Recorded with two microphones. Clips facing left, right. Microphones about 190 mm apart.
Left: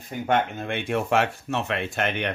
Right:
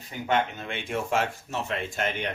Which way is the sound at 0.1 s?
50° left (ahead or behind).